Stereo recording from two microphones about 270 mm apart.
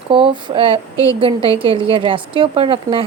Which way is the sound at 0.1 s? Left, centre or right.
Centre.